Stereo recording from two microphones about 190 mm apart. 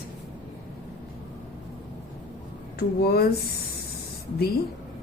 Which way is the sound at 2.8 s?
55° left (ahead or behind).